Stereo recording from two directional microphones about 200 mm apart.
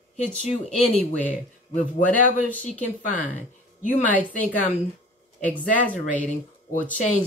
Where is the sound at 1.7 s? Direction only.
40° left (ahead or behind).